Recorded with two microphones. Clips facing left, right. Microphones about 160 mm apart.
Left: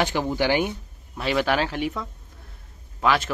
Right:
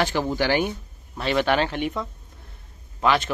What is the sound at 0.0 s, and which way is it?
Speech, 15° left (ahead or behind).